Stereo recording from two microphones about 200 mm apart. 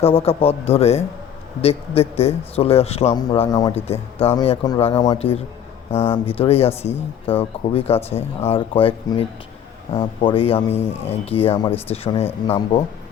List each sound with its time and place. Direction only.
0.0 s speech: 30° left (ahead or behind)